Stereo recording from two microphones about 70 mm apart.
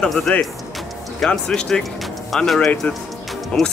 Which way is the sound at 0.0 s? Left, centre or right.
Centre.